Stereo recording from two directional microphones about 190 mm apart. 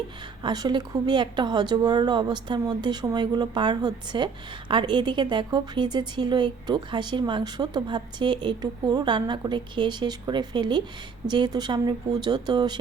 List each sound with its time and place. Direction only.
0.4 s a woman's voice: 20° right (ahead or behind)